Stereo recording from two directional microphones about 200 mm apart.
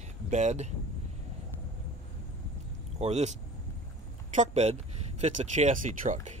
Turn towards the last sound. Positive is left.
turn(degrees=-40)  # may be behind; listen again after turning